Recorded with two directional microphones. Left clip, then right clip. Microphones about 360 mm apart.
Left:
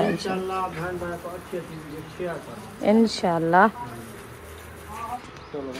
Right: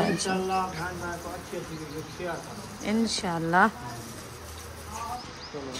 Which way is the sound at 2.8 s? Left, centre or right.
Centre.